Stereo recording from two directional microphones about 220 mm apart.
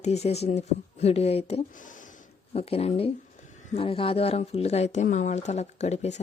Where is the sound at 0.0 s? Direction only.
30° left (ahead or behind).